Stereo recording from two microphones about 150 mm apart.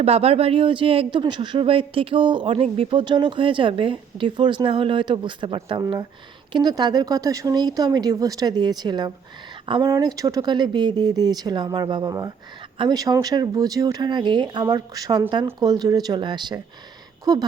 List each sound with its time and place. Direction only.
0.0 s speech: 40° right (ahead or behind); by 17.4 s 25° right (ahead or behind)